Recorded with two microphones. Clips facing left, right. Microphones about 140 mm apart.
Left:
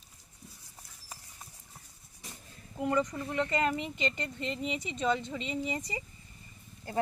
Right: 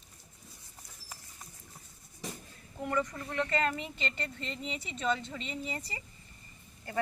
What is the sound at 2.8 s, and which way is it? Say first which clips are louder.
Speech: left 3 dB; 20° left (ahead or behind).